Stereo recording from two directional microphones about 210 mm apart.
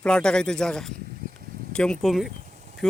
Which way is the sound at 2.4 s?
35° right (ahead or behind).